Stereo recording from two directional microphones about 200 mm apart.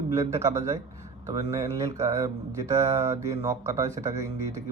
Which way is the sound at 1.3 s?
15° right (ahead or behind).